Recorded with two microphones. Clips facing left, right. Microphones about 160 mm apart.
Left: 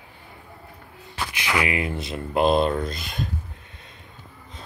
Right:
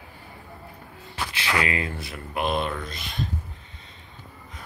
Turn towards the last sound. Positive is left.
turn(degrees=40)  # may be behind; listen again after turning